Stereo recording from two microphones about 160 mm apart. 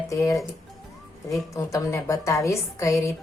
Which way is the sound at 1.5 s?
20° left (ahead or behind).